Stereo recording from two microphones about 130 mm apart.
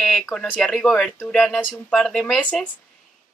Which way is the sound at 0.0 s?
5° left (ahead or behind).